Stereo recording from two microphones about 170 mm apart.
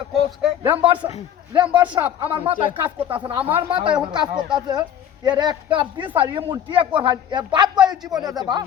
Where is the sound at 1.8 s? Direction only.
30° right (ahead or behind).